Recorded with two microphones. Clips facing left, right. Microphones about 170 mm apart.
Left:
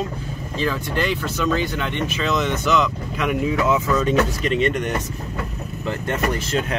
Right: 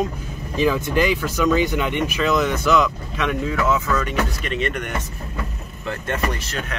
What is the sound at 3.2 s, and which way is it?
Speech, 15° left (ahead or behind).